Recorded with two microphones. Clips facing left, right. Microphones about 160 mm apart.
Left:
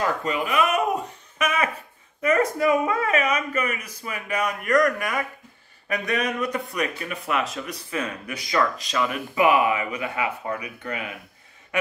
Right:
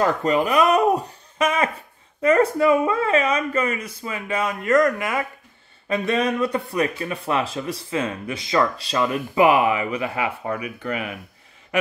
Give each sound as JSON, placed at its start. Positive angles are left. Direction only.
{"t": 0.0, "sound": "speech", "side_deg": -40}